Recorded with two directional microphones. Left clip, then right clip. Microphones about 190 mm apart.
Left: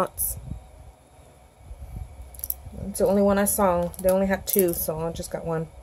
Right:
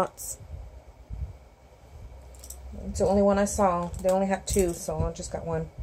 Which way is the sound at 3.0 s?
40° left (ahead or behind).